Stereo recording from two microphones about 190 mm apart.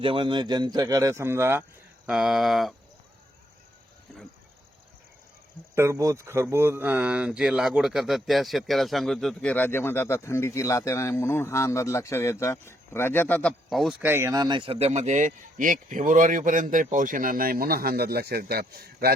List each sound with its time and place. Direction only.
0.0 s speech: 25° right (ahead or behind)
2.0 s speech: centre (ahead or behind)
5.7 s speech: 15° right (ahead or behind)
14.0 s speech: 10° right (ahead or behind); by 19.1 s 55° right (ahead or behind)